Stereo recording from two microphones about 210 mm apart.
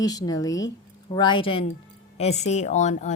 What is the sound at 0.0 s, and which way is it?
A woman's voice, 20° left (ahead or behind).